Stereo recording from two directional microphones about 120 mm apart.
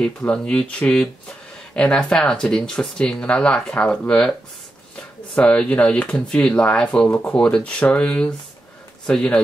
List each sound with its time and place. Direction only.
0.0 s speech: 10° left (ahead or behind)